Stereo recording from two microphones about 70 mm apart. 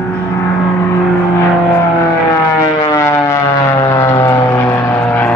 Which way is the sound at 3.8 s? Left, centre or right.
Left.